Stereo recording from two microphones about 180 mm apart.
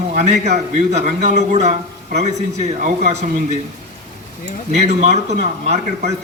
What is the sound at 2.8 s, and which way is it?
Speech, 45° right (ahead or behind).